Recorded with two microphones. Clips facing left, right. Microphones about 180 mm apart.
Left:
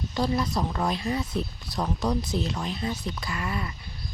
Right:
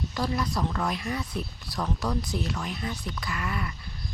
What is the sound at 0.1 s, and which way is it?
Speech, 25° left (ahead or behind).